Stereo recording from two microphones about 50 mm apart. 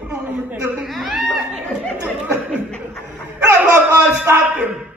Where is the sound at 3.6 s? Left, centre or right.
Right.